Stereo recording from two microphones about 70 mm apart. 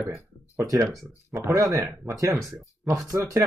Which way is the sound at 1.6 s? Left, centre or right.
Right.